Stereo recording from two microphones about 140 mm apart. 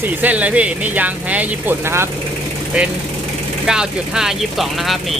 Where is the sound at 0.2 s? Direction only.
10° right (ahead or behind).